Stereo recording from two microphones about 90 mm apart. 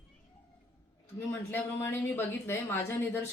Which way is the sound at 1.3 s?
25° left (ahead or behind).